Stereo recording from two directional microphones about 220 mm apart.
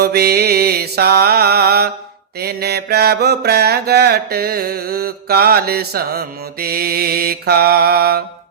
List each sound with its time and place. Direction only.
0.0 s mantra: 45° right (ahead or behind)